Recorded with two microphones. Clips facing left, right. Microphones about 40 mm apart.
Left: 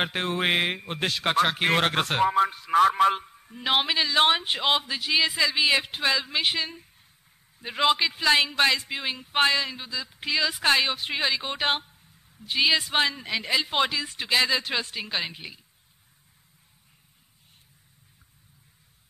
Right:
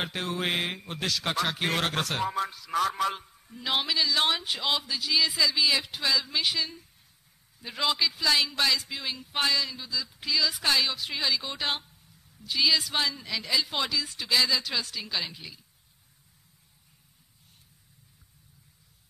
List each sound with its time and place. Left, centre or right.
0.0 s a man's voice: left